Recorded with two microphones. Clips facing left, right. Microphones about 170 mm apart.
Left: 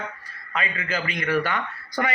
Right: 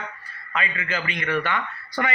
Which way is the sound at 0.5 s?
35° left (ahead or behind).